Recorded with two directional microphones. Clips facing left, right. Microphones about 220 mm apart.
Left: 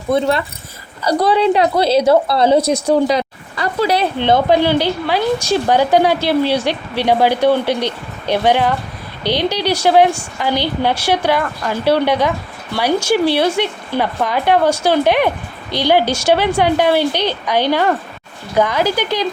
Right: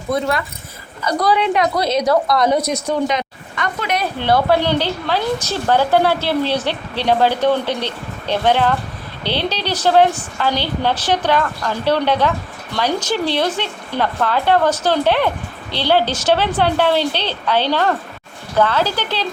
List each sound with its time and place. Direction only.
0.1 s a woman's voice: 30° left (ahead or behind)
4.2 s a woman's voice: 20° left (ahead or behind)